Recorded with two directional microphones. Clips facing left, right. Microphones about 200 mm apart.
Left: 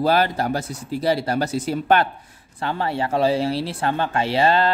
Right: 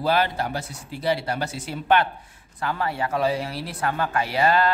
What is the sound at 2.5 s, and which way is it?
Speech, 30° left (ahead or behind).